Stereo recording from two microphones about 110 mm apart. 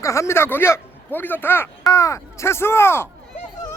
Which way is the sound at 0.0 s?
25° left (ahead or behind).